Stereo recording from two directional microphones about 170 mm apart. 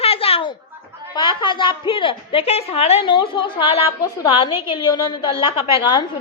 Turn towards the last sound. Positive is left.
turn(degrees=30)  # may be behind; listen again after turning